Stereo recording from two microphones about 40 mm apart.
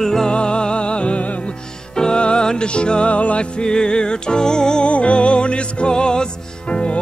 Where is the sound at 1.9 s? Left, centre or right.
Left.